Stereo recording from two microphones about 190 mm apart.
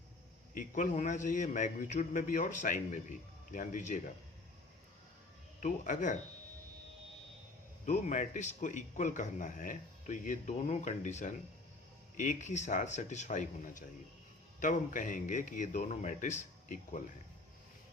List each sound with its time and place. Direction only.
0.5 s a man's voice: 40° left (ahead or behind)
5.5 s a man's voice: 40° left (ahead or behind)
7.9 s a man's voice: 40° left (ahead or behind)